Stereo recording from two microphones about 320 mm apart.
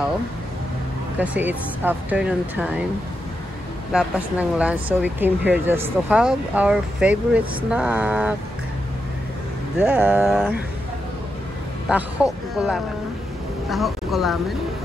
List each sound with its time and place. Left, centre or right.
1.2 s speech: centre
3.9 s speech: centre
9.8 s speech: centre
11.9 s speech: centre